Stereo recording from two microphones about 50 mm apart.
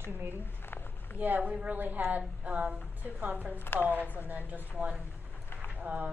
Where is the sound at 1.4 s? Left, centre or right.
Right.